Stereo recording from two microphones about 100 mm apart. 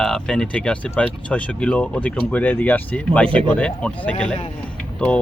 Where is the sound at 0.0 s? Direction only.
10° left (ahead or behind).